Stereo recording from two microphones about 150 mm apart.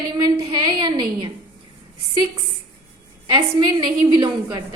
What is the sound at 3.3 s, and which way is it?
A woman's voice, 30° right (ahead or behind).